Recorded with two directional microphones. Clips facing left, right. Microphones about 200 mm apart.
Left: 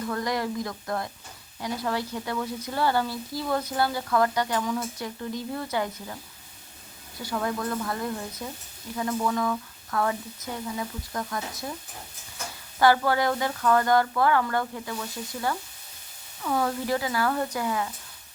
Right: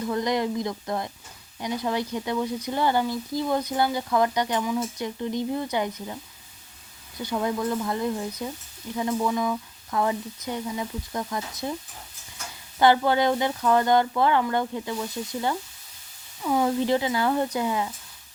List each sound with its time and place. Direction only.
0.1 s a woman's voice: 20° right (ahead or behind)
7.2 s a woman's voice: 20° right (ahead or behind)
12.8 s a woman's voice: 20° right (ahead or behind)